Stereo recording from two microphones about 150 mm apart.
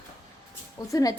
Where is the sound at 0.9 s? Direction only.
25° left (ahead or behind).